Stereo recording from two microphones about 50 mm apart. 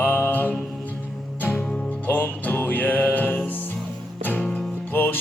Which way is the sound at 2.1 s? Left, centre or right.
Left.